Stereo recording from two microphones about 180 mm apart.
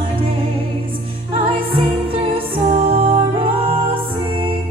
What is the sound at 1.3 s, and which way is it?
Music, 30° right (ahead or behind).